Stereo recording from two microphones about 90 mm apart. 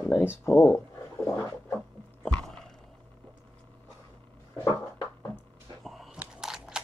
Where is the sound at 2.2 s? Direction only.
10° left (ahead or behind).